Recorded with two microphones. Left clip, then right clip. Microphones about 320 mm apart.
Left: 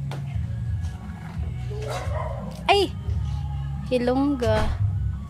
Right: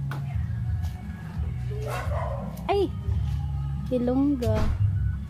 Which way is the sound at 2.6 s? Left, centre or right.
Left.